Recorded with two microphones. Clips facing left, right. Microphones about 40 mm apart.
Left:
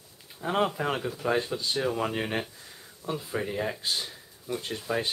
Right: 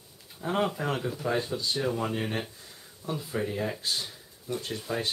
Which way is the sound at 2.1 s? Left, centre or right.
Left.